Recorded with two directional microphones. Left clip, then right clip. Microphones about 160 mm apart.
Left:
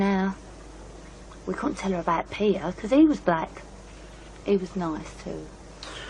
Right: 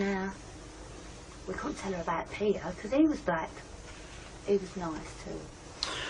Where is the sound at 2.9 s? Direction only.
35° left (ahead or behind).